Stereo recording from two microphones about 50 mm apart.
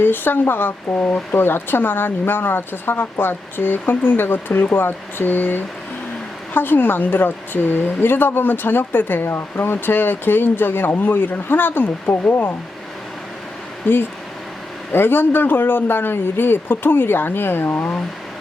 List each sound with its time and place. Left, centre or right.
0.0 s a woman's voice: left
13.8 s a woman's voice: left